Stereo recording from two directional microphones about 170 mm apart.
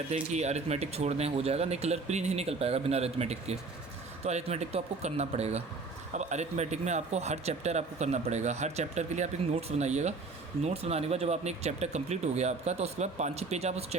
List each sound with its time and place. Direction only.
0.1 s speech: 40° right (ahead or behind)